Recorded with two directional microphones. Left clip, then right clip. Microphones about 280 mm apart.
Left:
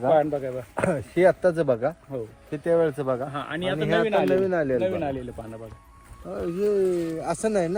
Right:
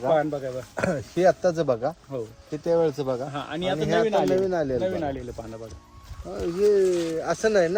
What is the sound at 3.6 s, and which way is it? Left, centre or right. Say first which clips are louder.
Speech: right 1 dB; left.